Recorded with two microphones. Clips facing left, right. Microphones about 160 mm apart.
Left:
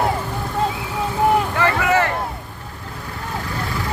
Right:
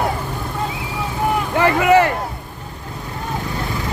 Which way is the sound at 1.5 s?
20° right (ahead or behind).